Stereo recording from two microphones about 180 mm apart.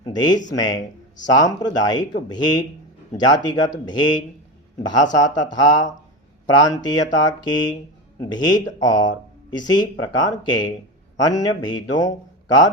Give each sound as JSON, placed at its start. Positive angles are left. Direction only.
{"t": 0.0, "sound": "a man's voice", "side_deg": 20}